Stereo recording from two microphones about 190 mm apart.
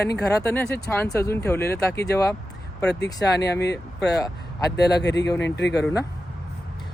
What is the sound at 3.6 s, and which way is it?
Speech, 65° left (ahead or behind).